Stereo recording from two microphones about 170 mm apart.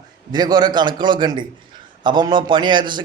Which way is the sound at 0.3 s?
25° right (ahead or behind).